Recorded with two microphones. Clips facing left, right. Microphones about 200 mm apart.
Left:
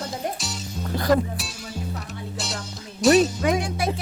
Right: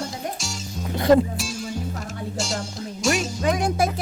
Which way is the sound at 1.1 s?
25° right (ahead or behind).